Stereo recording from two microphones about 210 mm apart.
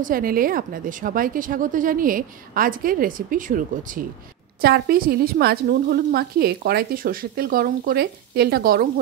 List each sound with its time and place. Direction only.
0.0 s a woman's voice: 45° right (ahead or behind)